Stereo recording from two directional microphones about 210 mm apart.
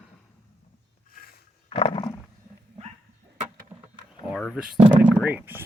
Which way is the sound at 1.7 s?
30° left (ahead or behind).